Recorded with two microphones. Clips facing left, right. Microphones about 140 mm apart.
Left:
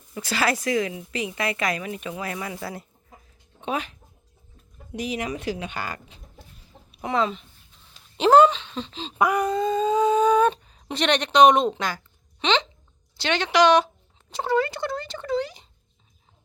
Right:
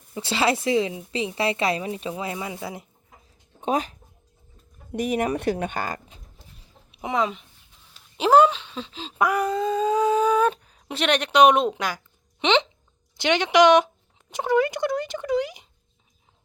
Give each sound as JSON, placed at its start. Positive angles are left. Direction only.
{"t": 0.1, "sound": "a woman's voice", "side_deg": -25}
{"t": 3.6, "sound": "speech", "side_deg": -40}
{"t": 4.9, "sound": "speech", "side_deg": -50}
{"t": 7.0, "sound": "a sound", "side_deg": -15}
{"t": 12.4, "sound": "speech", "side_deg": -20}